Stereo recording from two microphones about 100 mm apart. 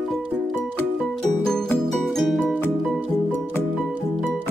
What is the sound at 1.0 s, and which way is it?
Music, 5° left (ahead or behind).